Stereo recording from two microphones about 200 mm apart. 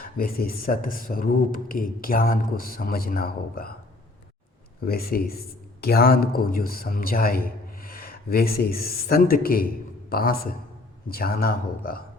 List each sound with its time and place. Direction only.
0.0 s speech: 50° left (ahead or behind)
4.8 s a man's voice: 50° left (ahead or behind)